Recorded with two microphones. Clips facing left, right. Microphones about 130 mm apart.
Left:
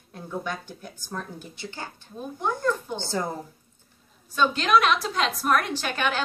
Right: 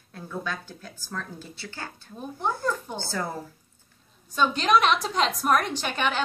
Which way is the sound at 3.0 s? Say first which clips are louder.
Left 3 dB; 20° left (ahead or behind).